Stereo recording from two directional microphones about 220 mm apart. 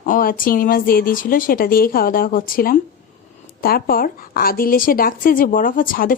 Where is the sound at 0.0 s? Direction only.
40° left (ahead or behind).